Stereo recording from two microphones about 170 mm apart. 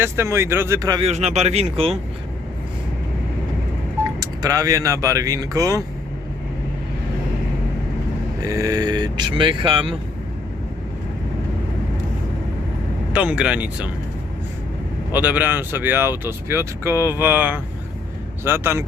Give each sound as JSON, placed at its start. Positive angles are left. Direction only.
{"t": 0.0, "sound": "speech", "side_deg": -15}
{"t": 1.0, "sound": "speech", "side_deg": -40}
{"t": 4.2, "sound": "speech", "side_deg": -20}
{"t": 8.4, "sound": "speech", "side_deg": -20}
{"t": 13.1, "sound": "speech", "side_deg": -5}
{"t": 15.1, "sound": "speech", "side_deg": -10}